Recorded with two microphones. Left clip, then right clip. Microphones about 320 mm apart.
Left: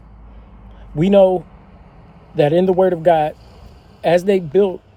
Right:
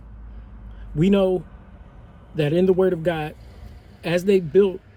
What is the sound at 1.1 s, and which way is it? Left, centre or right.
Speech, left.